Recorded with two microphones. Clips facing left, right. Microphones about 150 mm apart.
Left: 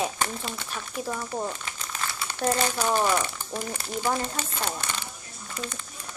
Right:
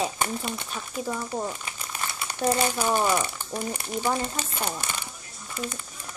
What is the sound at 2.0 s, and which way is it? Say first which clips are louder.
Speech: right 1 dB; 15° right (ahead or behind).